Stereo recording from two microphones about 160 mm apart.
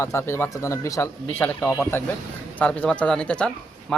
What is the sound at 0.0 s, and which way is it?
A man's voice, 15° left (ahead or behind).